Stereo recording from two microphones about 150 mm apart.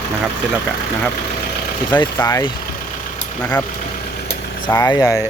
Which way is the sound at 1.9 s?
25° left (ahead or behind).